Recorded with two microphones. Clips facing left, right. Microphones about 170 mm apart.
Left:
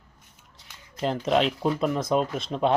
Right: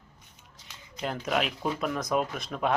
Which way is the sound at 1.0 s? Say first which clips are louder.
Left 6 dB; 25° left (ahead or behind).